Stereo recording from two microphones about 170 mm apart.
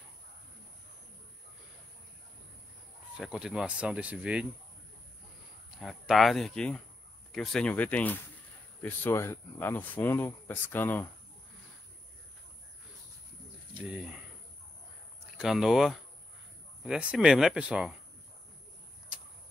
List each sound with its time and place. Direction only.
3.2 s speech: 5° right (ahead or behind)
5.8 s speech: centre (ahead or behind)
13.7 s speech: 5° right (ahead or behind)
15.3 s speech: 5° right (ahead or behind)
19.1 s a sound: 5° right (ahead or behind)